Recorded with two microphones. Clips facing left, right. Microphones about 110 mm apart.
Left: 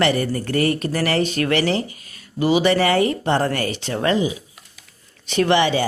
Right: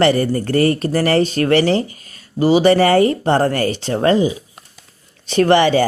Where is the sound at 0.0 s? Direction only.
35° right (ahead or behind).